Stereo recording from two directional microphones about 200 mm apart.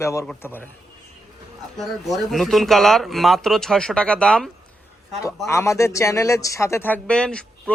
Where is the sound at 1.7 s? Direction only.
Centre (ahead or behind).